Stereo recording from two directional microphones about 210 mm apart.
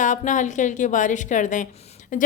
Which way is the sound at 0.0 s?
35° left (ahead or behind).